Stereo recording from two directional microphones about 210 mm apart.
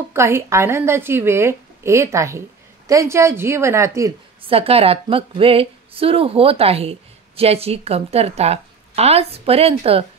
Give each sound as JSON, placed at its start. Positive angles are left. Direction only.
{"t": 0.1, "sound": "a woman's voice", "side_deg": -10}
{"t": 4.4, "sound": "a woman's voice", "side_deg": -25}